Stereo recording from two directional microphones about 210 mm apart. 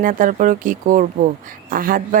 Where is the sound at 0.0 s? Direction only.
40° right (ahead or behind).